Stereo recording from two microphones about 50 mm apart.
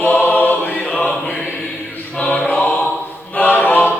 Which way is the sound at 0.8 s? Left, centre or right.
Centre.